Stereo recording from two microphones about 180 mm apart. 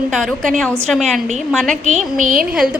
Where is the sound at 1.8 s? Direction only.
45° right (ahead or behind).